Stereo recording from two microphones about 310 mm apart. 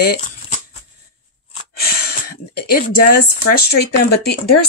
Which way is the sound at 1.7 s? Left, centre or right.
Left.